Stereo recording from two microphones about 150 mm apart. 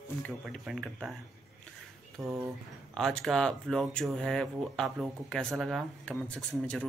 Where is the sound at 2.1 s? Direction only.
20° right (ahead or behind).